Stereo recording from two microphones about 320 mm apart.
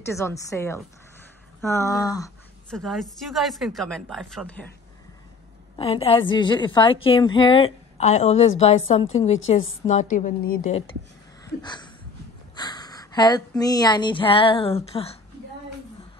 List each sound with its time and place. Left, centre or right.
0.0 s a woman's voice: centre
5.8 s a woman's voice: centre
11.4 s a sound: centre
12.5 s speech: centre